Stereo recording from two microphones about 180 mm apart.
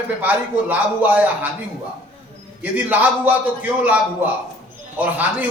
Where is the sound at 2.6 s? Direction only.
10° right (ahead or behind).